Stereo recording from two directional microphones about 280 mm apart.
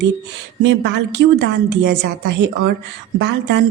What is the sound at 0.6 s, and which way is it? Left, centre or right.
Speech, right.